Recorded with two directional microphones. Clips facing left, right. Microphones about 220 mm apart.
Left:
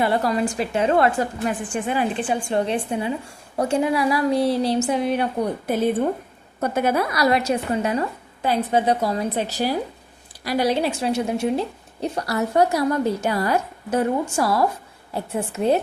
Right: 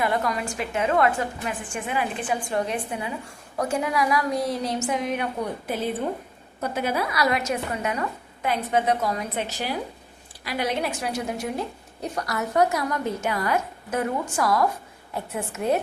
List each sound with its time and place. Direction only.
0.0 s speech: 30° left (ahead or behind)
6.6 s a woman's voice: 50° left (ahead or behind); by 15.8 s 30° left (ahead or behind)